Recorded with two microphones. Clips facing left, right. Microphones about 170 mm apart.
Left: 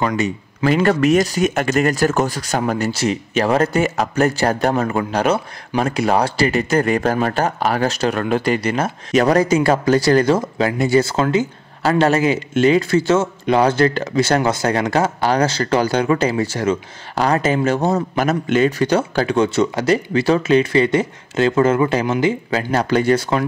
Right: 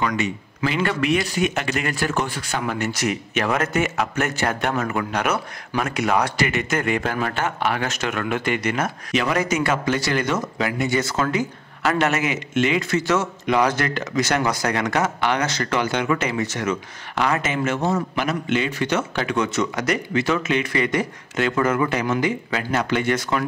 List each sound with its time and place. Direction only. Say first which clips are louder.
0.0 s speech: left 4 dB; 30° left (ahead or behind)
0.7 s speech: left 7 dB; 45° left (ahead or behind)